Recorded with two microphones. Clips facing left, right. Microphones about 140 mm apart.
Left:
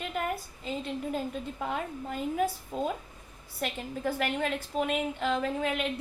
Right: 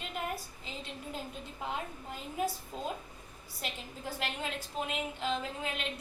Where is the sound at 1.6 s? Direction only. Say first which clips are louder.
Left 4 dB; 60° left (ahead or behind).